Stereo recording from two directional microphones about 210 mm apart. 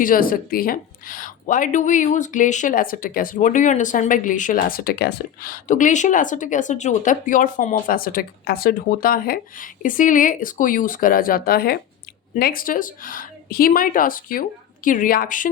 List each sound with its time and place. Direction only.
0.0 s a woman's voice: 40° left (ahead or behind)